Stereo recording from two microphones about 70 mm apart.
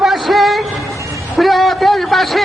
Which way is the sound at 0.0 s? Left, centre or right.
Centre.